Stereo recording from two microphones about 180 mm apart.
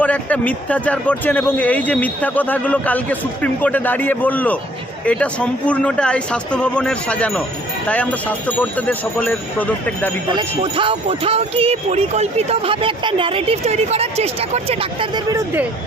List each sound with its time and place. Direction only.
0.0 s a man's voice: 10° left (ahead or behind)
10.2 s music: 25° right (ahead or behind)
15.3 s speech: 15° right (ahead or behind)